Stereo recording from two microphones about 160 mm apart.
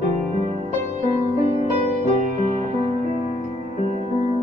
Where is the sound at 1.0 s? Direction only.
45° right (ahead or behind).